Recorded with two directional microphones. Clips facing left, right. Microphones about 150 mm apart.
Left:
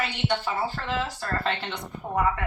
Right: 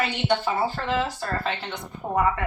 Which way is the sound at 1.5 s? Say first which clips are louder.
Even; 5° right (ahead or behind).